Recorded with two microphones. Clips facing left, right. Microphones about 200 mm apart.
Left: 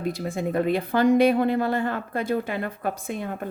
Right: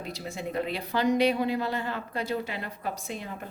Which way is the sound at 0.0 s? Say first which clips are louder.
Left 8 dB; 50° left (ahead or behind).